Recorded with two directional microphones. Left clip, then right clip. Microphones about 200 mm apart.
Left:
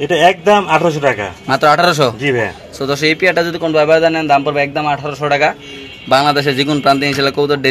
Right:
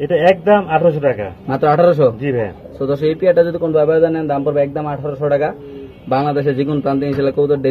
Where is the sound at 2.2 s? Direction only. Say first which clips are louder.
Left 4 dB; 45° left (ahead or behind).